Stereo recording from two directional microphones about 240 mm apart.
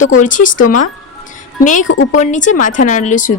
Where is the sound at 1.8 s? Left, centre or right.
Left.